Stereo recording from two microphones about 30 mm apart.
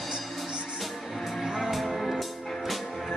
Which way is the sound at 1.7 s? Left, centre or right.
Centre.